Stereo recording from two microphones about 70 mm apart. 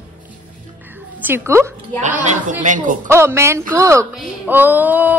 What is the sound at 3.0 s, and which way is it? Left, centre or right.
A woman's voice, right.